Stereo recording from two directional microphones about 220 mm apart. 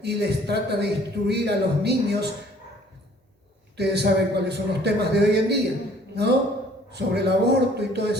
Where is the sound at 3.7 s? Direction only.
50° right (ahead or behind).